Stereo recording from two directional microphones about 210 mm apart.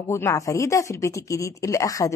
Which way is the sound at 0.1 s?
15° left (ahead or behind).